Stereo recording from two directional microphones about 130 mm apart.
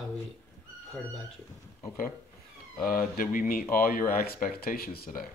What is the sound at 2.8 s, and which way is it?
Speech, 90° left.